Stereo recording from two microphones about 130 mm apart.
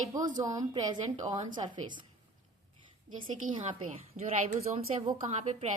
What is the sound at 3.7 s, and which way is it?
Speech, 55° right (ahead or behind).